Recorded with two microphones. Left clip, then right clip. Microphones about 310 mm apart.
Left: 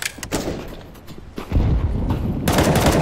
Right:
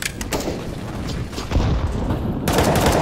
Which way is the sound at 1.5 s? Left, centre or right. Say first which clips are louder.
Right 1 dB; right.